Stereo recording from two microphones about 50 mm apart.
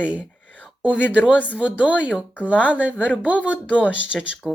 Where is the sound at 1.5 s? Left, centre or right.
Right.